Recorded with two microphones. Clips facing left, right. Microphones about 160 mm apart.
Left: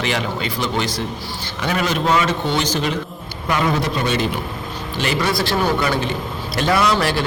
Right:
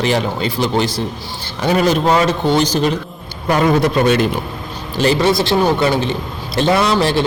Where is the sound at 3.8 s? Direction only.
55° right (ahead or behind).